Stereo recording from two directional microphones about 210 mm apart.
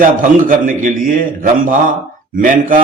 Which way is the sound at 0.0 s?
40° right (ahead or behind).